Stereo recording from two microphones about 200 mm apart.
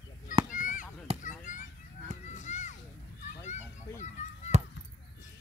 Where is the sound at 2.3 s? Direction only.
35° left (ahead or behind).